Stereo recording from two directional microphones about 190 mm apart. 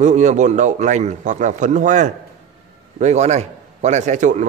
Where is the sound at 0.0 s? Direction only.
40° right (ahead or behind).